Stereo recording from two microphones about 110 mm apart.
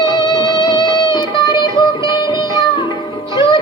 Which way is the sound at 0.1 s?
40° left (ahead or behind).